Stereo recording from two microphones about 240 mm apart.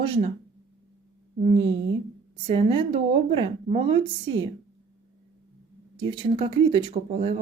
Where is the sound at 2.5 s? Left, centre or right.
Right.